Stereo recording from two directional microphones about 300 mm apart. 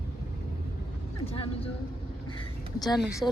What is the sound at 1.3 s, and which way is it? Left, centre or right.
Speech, centre.